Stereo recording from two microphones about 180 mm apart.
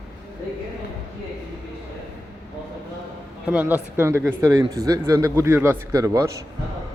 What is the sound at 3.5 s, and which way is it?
Speech, 10° right (ahead or behind).